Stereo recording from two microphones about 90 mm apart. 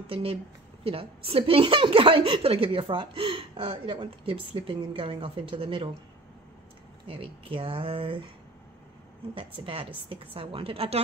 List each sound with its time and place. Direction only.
0.0 s a woman's voice: 90° right; by 5.9 s 70° right (ahead or behind)
7.1 s a woman's voice: 80° right
9.3 s a woman's voice: 80° right